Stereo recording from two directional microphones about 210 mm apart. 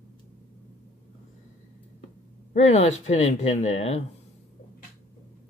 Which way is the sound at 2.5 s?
35° left (ahead or behind).